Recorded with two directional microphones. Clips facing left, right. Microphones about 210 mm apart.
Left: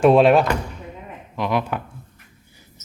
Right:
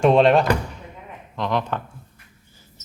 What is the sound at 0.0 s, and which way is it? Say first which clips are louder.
Speech: left 2 dB; 5° left (ahead or behind).